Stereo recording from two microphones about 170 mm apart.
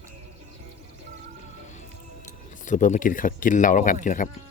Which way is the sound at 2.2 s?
50° left (ahead or behind).